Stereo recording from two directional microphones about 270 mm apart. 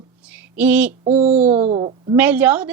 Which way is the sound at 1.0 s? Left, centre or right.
Right.